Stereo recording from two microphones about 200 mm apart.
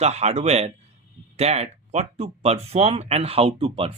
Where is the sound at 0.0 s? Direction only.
35° right (ahead or behind).